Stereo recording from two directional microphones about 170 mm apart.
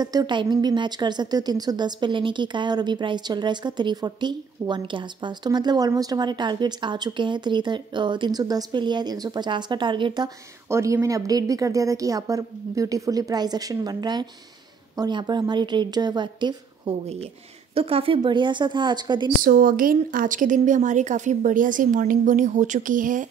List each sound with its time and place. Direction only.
0.0 s speech: 25° right (ahead or behind)
19.4 s a woman's voice: 55° right (ahead or behind)